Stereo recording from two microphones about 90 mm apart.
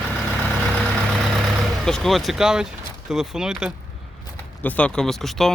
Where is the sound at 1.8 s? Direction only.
5° left (ahead or behind).